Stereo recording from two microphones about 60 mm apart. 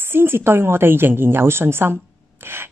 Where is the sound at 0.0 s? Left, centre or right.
Right.